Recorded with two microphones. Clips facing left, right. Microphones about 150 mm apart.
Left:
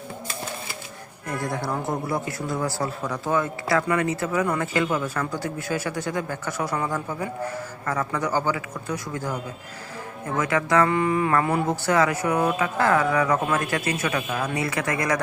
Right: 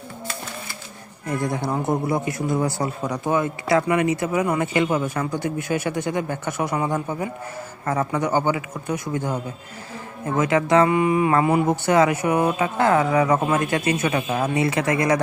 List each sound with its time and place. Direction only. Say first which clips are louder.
1.4 s speech: right 3 dB; 20° right (ahead or behind)
10.8 s speech: right 3 dB; 15° right (ahead or behind)